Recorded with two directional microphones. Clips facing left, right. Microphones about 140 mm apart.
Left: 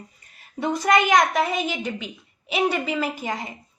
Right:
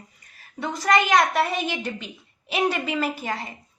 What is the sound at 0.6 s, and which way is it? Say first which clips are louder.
Speech: left 5 dB; 20° left (ahead or behind).